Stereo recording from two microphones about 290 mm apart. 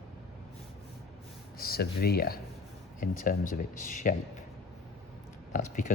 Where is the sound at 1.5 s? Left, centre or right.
Left.